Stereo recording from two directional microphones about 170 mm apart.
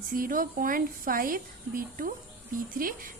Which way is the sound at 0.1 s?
55° right (ahead or behind).